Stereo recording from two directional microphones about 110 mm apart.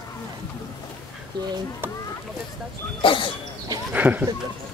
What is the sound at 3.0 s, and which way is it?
Speech, 50° left (ahead or behind).